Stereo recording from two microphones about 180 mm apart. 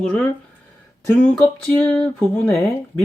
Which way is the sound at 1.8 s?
10° left (ahead or behind).